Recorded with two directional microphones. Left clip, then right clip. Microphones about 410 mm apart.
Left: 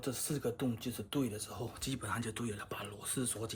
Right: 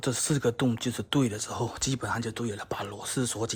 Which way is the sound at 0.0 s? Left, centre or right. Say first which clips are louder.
Right 10 dB; centre.